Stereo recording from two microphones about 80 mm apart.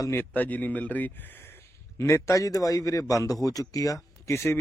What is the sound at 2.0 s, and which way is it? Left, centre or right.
Speech, left.